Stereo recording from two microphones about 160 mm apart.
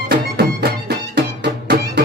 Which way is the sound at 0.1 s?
90° right.